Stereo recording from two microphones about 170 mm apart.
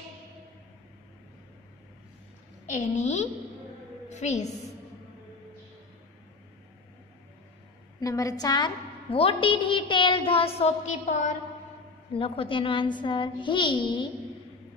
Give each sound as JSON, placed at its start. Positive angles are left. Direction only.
{"t": 2.6, "sound": "a woman's voice", "side_deg": 45}
{"t": 8.0, "sound": "a woman's voice", "side_deg": 20}
{"t": 12.1, "sound": "a child's voice", "side_deg": 30}